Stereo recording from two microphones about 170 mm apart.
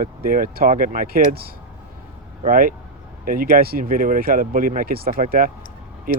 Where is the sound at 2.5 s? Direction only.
55° right (ahead or behind).